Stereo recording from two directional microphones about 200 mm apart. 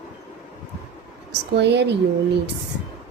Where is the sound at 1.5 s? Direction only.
60° right (ahead or behind).